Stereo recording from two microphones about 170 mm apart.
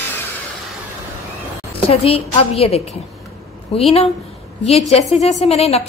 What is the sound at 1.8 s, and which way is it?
A woman's voice, 35° left (ahead or behind).